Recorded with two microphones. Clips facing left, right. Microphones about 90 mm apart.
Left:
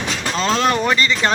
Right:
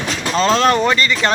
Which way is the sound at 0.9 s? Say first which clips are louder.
Right 1 dB; 15° left (ahead or behind).